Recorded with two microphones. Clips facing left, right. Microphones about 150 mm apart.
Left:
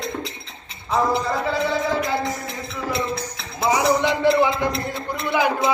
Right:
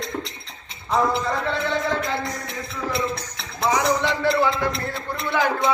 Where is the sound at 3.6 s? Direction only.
10° left (ahead or behind).